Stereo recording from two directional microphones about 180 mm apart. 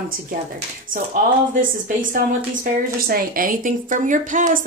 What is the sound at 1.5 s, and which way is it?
Speech, 50° right (ahead or behind).